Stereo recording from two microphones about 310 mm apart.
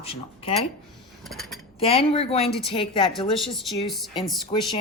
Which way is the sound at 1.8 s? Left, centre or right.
Centre.